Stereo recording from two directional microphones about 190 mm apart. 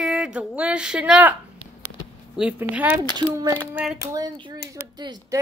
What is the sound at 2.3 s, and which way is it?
Speech, 5° right (ahead or behind).